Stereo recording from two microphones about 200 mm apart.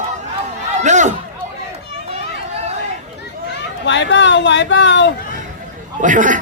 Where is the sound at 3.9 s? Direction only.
65° left (ahead or behind).